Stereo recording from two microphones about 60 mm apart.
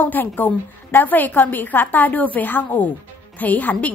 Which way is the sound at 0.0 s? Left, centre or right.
Left.